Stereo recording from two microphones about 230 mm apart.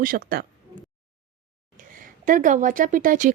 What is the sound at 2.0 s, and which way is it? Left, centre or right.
Speech, right.